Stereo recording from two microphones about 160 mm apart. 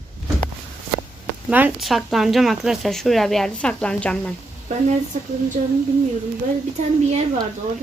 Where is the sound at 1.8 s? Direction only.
Centre (ahead or behind).